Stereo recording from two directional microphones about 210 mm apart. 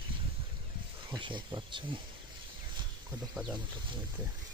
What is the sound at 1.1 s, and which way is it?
Speech, 20° right (ahead or behind).